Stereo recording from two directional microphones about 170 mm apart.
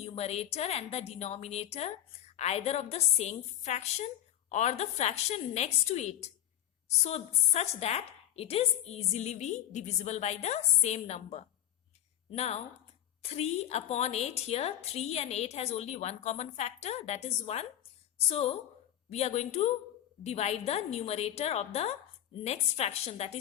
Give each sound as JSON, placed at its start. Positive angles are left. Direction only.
{"t": 0.0, "sound": "a woman's voice", "side_deg": 35}